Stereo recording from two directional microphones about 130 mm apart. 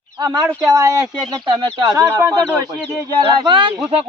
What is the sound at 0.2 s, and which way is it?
Speech, 30° right (ahead or behind).